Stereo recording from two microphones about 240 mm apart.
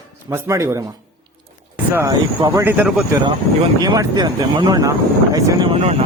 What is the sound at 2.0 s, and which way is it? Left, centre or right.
Speech, centre.